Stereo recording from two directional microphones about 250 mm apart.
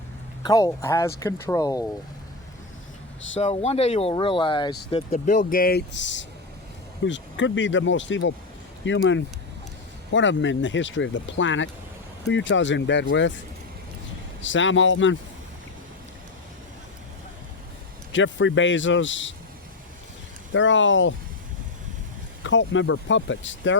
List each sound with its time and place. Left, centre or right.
0.4 s speech: centre
3.4 s speech: left
5.1 s speech: left
14.4 s speech: left
18.1 s speech: left
20.5 s speech: left
22.4 s speech: left